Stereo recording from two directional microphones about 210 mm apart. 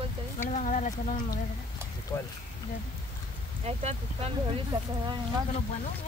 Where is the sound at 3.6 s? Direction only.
30° right (ahead or behind).